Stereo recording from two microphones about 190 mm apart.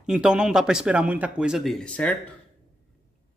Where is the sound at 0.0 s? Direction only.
5° right (ahead or behind).